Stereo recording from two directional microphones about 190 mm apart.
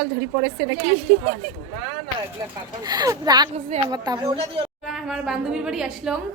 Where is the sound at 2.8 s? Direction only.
20° right (ahead or behind).